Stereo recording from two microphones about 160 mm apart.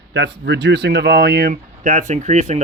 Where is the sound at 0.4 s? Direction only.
90° right.